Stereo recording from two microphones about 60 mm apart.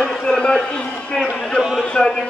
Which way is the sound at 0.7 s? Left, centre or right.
Centre.